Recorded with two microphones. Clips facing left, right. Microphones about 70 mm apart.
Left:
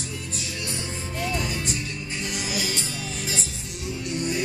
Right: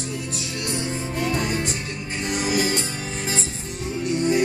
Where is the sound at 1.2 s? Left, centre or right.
Right.